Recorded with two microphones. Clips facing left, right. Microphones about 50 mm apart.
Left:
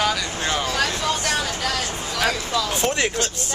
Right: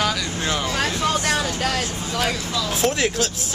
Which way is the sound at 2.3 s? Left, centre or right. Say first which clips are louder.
Left 1 dB; centre.